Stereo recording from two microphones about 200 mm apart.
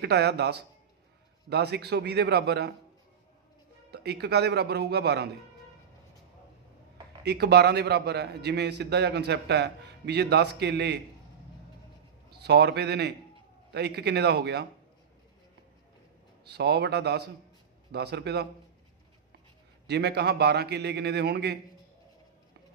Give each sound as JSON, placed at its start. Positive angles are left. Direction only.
{"t": 0.0, "sound": "a man's voice", "side_deg": -55}
{"t": 3.9, "sound": "a man's voice", "side_deg": -55}
{"t": 7.2, "sound": "a man's voice", "side_deg": -55}
{"t": 12.3, "sound": "a man's voice", "side_deg": -55}
{"t": 16.4, "sound": "a man's voice", "side_deg": -55}
{"t": 19.9, "sound": "a man's voice", "side_deg": -55}